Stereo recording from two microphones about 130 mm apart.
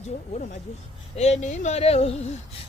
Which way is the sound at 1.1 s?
65° left (ahead or behind).